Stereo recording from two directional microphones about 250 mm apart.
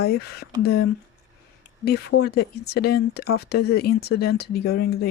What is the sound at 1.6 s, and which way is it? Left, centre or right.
Speech, left.